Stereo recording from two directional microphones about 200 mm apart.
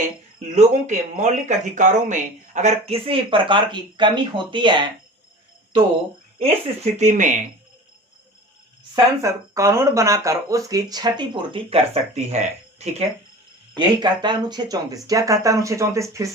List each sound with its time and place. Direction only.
0.5 s speech: 35° right (ahead or behind)
6.4 s speech: 35° right (ahead or behind)
9.2 s speech: 15° right (ahead or behind); by 12.9 s 35° right (ahead or behind)
13.7 s speech: 20° right (ahead or behind)